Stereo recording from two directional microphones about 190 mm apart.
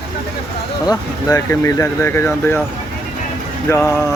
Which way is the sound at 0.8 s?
15° left (ahead or behind).